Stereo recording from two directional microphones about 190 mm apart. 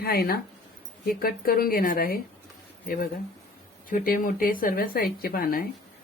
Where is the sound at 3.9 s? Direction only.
45° left (ahead or behind).